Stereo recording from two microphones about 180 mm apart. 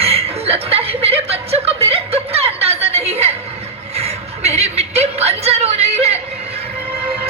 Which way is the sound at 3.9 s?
35° right (ahead or behind).